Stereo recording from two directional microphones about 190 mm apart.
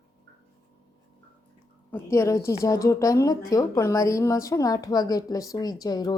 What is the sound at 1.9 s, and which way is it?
A woman's voice, 15° left (ahead or behind).